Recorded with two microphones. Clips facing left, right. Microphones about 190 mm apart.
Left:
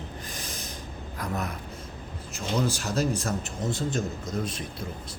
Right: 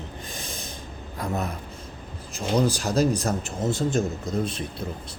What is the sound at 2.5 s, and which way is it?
Speech, 35° right (ahead or behind).